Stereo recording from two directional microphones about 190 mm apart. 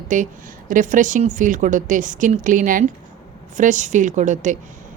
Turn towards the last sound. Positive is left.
turn(degrees=-40)  # may be behind; listen again after turning